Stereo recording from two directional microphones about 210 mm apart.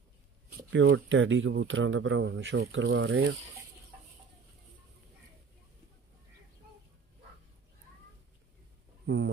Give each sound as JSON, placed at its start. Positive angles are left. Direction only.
{"t": 0.7, "sound": "a man's voice", "side_deg": -60}
{"t": 9.0, "sound": "speech", "side_deg": -60}